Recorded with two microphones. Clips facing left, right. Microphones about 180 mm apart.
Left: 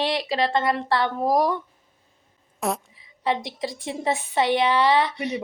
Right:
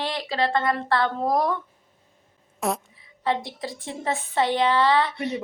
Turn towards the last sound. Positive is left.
turn(degrees=15)  # may be behind; listen again after turning